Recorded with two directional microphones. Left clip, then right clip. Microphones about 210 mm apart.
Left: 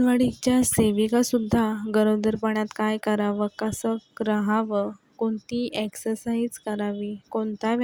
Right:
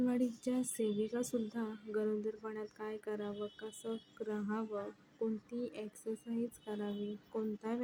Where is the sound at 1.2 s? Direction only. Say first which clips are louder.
Left 16 dB; 45° left (ahead or behind).